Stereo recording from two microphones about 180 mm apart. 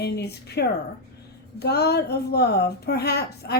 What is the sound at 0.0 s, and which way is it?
A woman's voice, 65° left (ahead or behind).